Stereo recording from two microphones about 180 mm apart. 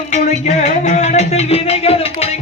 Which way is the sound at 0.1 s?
40° left (ahead or behind).